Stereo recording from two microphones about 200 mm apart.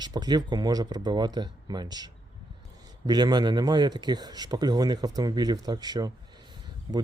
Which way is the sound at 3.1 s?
20° right (ahead or behind).